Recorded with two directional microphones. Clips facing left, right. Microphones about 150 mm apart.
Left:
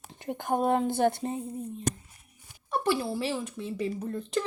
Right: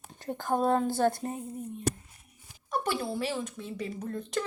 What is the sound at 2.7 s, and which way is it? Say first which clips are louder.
A woman's voice: left 3 dB; centre (ahead or behind).